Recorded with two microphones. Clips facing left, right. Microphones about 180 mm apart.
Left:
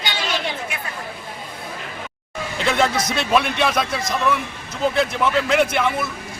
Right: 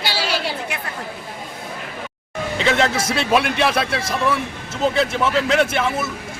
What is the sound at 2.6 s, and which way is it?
Speech, centre (ahead or behind).